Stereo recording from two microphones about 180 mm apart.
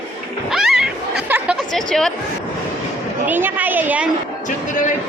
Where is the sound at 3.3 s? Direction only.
10° right (ahead or behind).